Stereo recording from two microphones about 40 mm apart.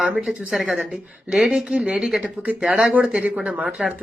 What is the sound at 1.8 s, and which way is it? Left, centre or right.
Speech, centre.